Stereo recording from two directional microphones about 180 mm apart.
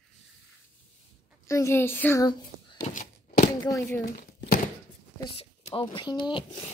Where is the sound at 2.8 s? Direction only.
45° left (ahead or behind).